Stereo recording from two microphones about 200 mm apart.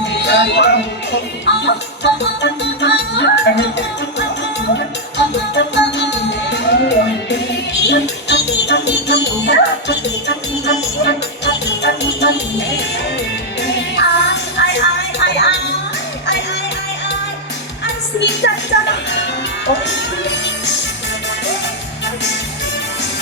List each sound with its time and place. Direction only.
0.3 s music: 60° left (ahead or behind)
5.5 s music: 60° left (ahead or behind)
13.6 s music: 60° left (ahead or behind)
18.2 s music: 60° left (ahead or behind)
19.6 s music: 65° left (ahead or behind)